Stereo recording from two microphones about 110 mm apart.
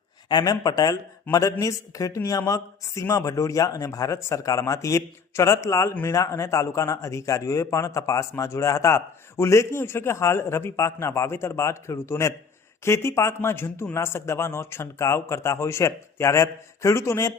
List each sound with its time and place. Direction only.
0.3 s a man's voice: 40° left (ahead or behind)